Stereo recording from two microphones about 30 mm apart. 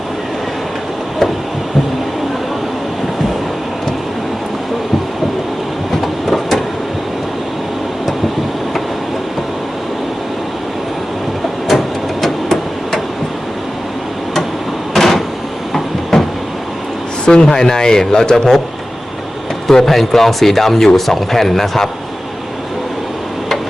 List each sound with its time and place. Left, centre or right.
6.0 s train: centre
11.7 s a sound: centre
12.2 s hammer: centre
14.9 s door: centre
16.1 s vehicle: centre
17.2 s speech: left
19.8 s speech: centre